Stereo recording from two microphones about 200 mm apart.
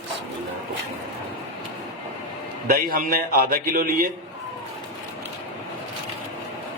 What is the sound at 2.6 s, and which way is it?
A man's voice, 45° right (ahead or behind).